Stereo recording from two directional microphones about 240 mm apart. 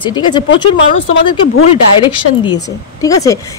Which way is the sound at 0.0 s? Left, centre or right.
Centre.